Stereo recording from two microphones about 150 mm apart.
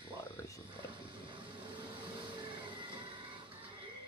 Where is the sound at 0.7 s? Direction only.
35° right (ahead or behind).